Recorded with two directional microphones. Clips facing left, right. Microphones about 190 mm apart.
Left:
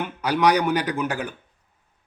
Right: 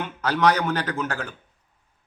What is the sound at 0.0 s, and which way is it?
Speech, 15° left (ahead or behind).